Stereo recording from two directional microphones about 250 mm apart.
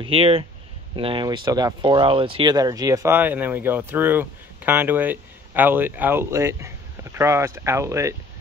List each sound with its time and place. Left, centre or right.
0.0 s speech: right